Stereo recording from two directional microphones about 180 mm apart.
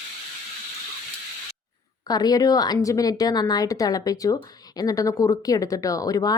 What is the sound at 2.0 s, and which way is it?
A woman's voice, 20° left (ahead or behind).